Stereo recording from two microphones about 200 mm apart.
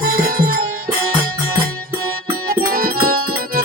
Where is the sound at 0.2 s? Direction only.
45° right (ahead or behind).